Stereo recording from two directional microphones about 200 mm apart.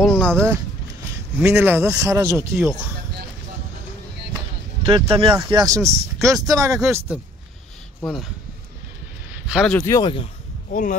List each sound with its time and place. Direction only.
0.1 s speech: 5° left (ahead or behind)
1.4 s speech: 10° right (ahead or behind)
4.8 s speech: 25° right (ahead or behind)
8.0 s speech: centre (ahead or behind)
9.5 s speech: 5° left (ahead or behind); by 10.2 s 20° left (ahead or behind)
10.7 s speech: 40° left (ahead or behind)